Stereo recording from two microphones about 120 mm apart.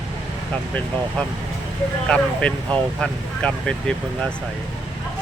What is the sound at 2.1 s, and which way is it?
Speech, 10° left (ahead or behind).